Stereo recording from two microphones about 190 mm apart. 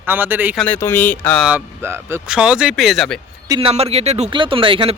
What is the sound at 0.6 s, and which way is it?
Speech, 10° left (ahead or behind).